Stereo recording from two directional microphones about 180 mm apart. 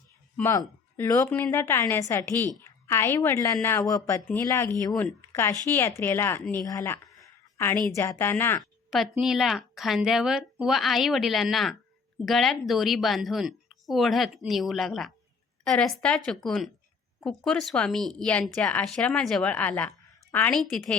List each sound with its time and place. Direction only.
0.3 s a woman's voice: 15° left (ahead or behind)
6.7 s a sound: 15° left (ahead or behind)
7.9 s a woman's voice: 15° left (ahead or behind)
8.9 s speech: centre (ahead or behind)